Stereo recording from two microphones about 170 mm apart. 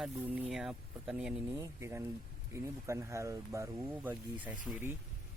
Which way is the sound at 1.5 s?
15° right (ahead or behind).